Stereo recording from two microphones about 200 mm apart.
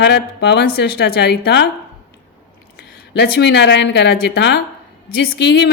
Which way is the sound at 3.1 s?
60° left (ahead or behind).